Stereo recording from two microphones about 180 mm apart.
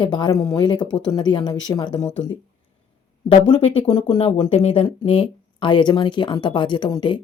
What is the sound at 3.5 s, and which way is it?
Speech, 25° left (ahead or behind).